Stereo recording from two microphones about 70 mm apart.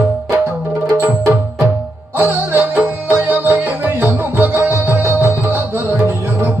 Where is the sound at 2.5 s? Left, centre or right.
Right.